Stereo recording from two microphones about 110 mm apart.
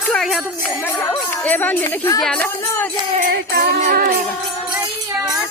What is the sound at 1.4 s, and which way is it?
Speech, 15° left (ahead or behind).